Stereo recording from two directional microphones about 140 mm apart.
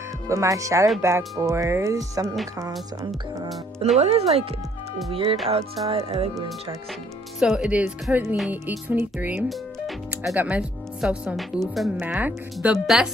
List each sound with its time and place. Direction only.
0.3 s speech: 20° right (ahead or behind)
4.0 s speech: 45° right (ahead or behind)
7.3 s speech: 5° right (ahead or behind)
9.5 s music: centre (ahead or behind)
10.3 s speech: 10° right (ahead or behind)
12.0 s speech: 10° right (ahead or behind)